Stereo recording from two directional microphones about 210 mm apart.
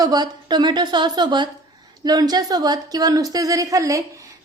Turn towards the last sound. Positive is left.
turn(degrees=-15)  # may be behind; listen again after turning